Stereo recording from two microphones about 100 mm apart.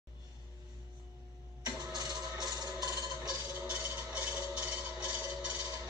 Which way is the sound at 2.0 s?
40° right (ahead or behind).